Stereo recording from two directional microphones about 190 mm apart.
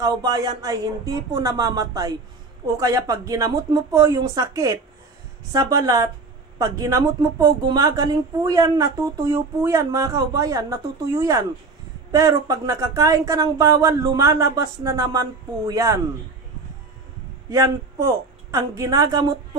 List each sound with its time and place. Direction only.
0.0 s speech: 20° right (ahead or behind)
17.5 s a woman's voice: 15° right (ahead or behind)